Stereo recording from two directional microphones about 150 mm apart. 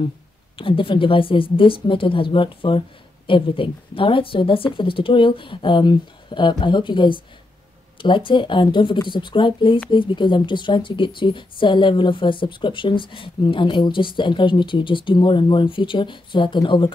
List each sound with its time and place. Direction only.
0.6 s a woman's voice: 35° left (ahead or behind)